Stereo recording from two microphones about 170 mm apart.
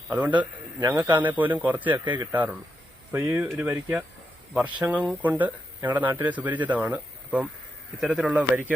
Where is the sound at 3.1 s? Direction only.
15° right (ahead or behind).